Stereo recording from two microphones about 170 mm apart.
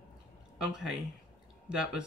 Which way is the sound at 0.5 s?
5° right (ahead or behind).